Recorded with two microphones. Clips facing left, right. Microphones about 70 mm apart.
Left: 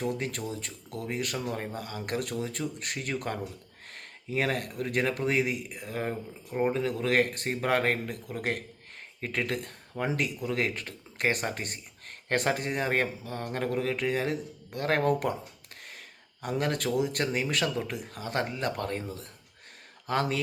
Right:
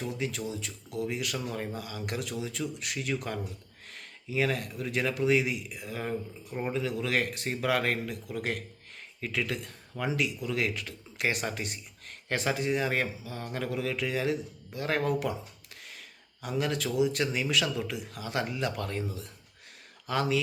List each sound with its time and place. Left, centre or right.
0.1 s speech: left
6.5 s speech: left
6.7 s speech: left
15.8 s a sound: left
17.4 s speech: left